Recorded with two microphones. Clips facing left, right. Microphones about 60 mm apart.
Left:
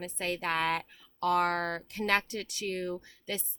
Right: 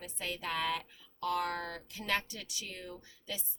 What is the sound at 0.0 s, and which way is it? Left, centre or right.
A woman's voice, left.